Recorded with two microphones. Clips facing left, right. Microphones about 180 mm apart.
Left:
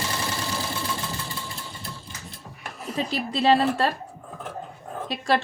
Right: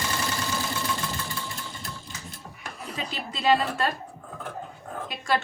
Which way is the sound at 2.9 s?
35° left (ahead or behind).